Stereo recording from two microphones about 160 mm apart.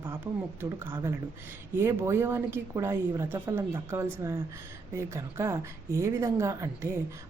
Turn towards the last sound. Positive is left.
turn(degrees=-15)  # may be behind; listen again after turning